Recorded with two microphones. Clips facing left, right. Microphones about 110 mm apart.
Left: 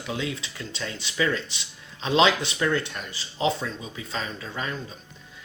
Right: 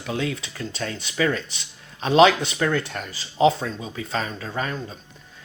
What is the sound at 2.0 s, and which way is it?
Speech, 45° right (ahead or behind).